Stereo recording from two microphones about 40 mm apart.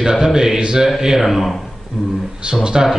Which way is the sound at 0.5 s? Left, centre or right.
Right.